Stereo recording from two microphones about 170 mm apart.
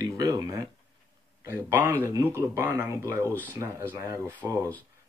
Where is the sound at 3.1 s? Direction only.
10° left (ahead or behind).